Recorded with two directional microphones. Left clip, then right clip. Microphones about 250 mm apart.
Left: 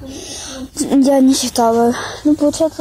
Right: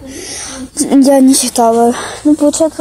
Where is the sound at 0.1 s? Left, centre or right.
Centre.